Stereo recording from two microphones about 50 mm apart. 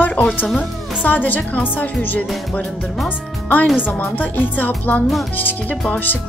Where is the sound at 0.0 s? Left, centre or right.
Left.